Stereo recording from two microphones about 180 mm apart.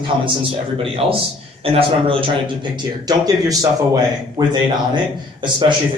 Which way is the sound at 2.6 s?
20° right (ahead or behind).